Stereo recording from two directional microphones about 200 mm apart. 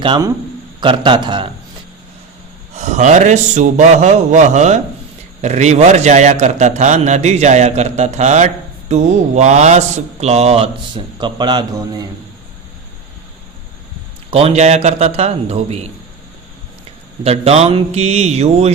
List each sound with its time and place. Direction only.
0.0 s a man's voice: 25° right (ahead or behind)
2.7 s speech: 35° right (ahead or behind); by 12.0 s 20° right (ahead or behind)
14.3 s speech: 30° right (ahead or behind)
17.2 s speech: 30° right (ahead or behind)